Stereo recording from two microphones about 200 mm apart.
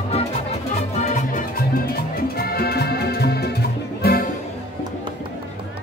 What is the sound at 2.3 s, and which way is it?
Music, 50° left (ahead or behind).